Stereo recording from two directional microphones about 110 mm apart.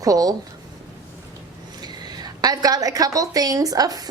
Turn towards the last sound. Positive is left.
turn(degrees=-35)  # may be behind; listen again after turning